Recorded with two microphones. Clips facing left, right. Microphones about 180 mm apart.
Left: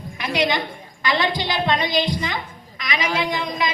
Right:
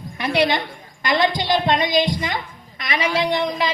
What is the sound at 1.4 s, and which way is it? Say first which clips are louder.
Speech: right 3 dB; 20° right (ahead or behind).